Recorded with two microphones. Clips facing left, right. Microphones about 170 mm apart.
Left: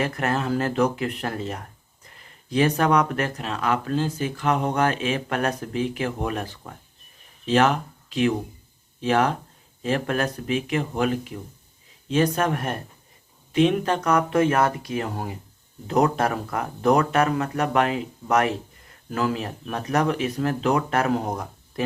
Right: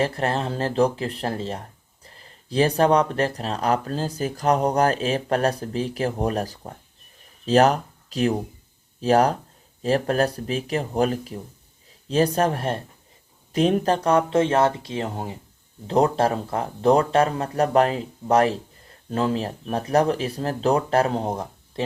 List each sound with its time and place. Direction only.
0.0 s speech: 30° right (ahead or behind)